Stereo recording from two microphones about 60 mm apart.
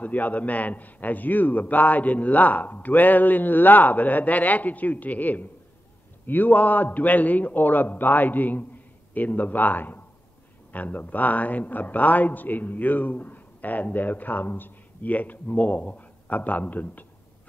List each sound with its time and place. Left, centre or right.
0.0 s a man's voice: left